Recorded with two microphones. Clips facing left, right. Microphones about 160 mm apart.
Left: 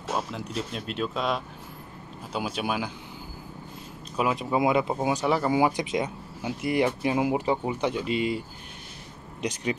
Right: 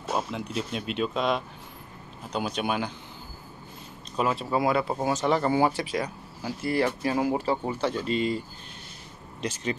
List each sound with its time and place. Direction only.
0.1 s speech: centre (ahead or behind)
4.2 s speech: 10° left (ahead or behind)